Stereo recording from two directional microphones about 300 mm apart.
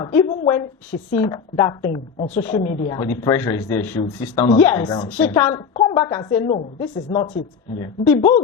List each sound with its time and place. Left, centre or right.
0.0 s a woman's voice: centre